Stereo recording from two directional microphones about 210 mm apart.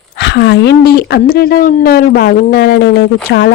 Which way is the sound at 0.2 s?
55° left (ahead or behind).